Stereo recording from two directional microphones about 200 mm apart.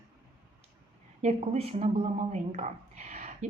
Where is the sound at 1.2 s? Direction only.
30° right (ahead or behind).